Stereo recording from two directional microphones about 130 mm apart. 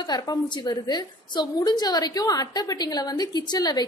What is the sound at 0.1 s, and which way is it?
A woman's voice, 30° left (ahead or behind).